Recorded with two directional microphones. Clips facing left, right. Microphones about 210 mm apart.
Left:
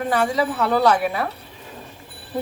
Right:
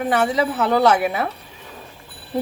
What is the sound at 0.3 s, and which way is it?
Speech, 20° right (ahead or behind).